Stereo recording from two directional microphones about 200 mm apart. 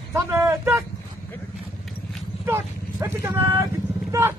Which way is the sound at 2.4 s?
10° right (ahead or behind).